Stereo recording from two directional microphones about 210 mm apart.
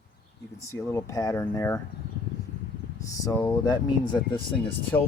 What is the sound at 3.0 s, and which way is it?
Speech, 15° left (ahead or behind).